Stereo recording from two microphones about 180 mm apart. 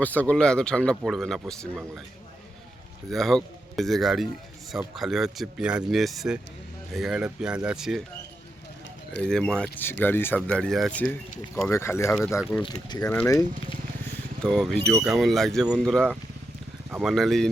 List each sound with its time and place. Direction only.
0.0 s speech: 10° left (ahead or behind)
3.1 s speech: centre (ahead or behind)
9.2 s speech: 5° left (ahead or behind)
12.5 s speech: centre (ahead or behind)
12.9 s speech: 20° left (ahead or behind)
14.4 s speech: 5° left (ahead or behind)